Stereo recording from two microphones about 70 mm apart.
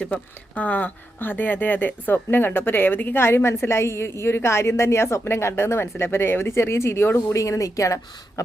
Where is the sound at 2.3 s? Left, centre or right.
Left.